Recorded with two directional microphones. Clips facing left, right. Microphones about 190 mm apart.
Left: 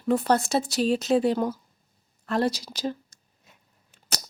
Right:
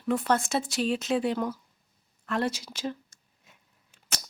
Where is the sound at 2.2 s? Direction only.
35° left (ahead or behind).